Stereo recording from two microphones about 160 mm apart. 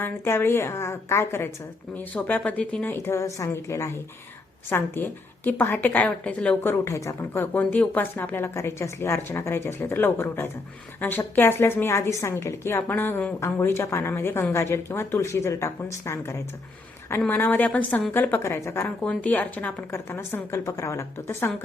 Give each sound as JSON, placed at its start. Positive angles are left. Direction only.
{"t": 0.0, "sound": "a woman's voice", "side_deg": 15}